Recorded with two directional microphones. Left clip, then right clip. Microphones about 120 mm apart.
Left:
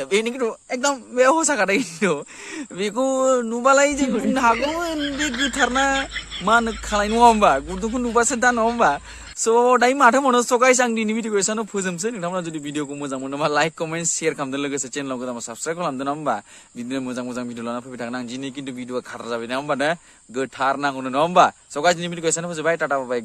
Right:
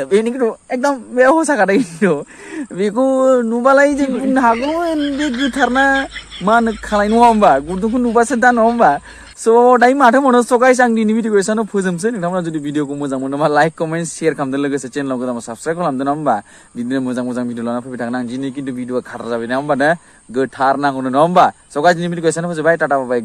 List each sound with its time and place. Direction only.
0.1 s speech: 15° left (ahead or behind)
0.4 s speech: 30° left (ahead or behind)
1.3 s speech: 5° left (ahead or behind)
2.0 s speech: 25° left (ahead or behind)
2.8 s a woman's voice: 10° left (ahead or behind)